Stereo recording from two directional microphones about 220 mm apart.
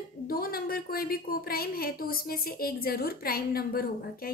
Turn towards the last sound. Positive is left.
turn(degrees=45)  # may be behind; listen again after turning